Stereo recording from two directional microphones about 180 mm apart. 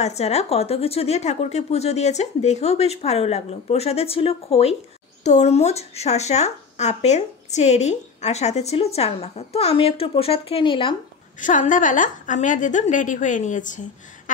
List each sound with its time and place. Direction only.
0.0 s speech: 35° left (ahead or behind)
11.3 s a woman's voice: 45° left (ahead or behind)